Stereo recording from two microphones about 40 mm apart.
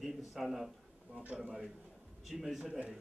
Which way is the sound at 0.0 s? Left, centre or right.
Centre.